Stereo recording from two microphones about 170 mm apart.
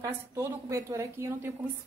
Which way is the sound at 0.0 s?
15° right (ahead or behind).